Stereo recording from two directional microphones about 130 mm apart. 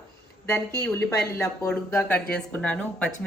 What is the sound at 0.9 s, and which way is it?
A woman's voice, 20° left (ahead or behind).